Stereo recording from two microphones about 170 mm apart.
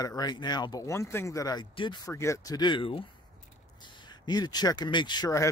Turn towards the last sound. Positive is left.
turn(degrees=20)  # may be behind; listen again after turning